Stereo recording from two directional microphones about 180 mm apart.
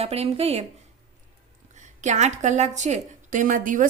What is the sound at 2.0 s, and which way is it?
A woman's voice, 40° right (ahead or behind).